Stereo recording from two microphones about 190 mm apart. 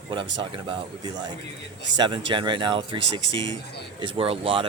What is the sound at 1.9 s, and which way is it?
Speech, 25° right (ahead or behind).